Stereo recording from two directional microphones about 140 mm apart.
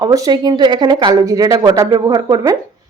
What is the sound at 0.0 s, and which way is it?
A woman's voice, 25° right (ahead or behind).